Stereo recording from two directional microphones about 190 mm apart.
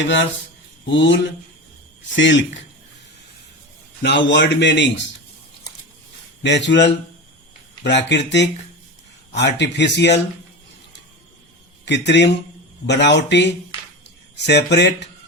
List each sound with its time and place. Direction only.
0.9 s a man's voice: 70° left (ahead or behind)
4.0 s a man's voice: 70° left (ahead or behind)
6.4 s a man's voice: 65° left (ahead or behind)
11.9 s speech: 65° left (ahead or behind)